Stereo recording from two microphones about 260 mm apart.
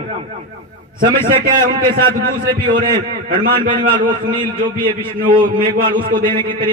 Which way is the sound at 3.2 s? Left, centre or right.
Right.